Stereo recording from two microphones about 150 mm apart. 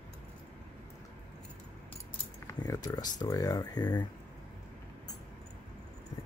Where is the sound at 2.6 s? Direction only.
25° left (ahead or behind).